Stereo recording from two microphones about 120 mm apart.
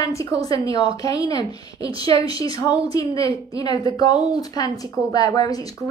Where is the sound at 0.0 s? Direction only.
25° left (ahead or behind).